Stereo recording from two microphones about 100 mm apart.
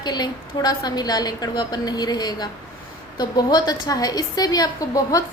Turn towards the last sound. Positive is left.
turn(degrees=35)  # may be behind; listen again after turning